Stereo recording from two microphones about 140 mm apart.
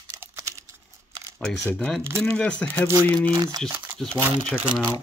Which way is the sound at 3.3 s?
30° right (ahead or behind).